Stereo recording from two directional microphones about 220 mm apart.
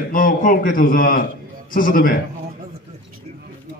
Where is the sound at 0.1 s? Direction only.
40° left (ahead or behind).